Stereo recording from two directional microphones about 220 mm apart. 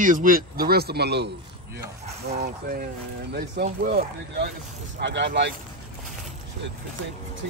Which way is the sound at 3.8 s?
45° right (ahead or behind).